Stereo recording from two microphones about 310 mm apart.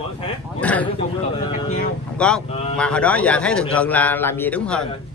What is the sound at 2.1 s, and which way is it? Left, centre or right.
Speech, centre.